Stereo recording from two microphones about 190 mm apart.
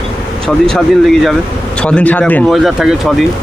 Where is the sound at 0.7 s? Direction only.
Centre (ahead or behind).